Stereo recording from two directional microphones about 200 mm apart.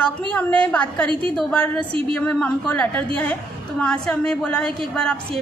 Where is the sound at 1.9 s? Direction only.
25° right (ahead or behind).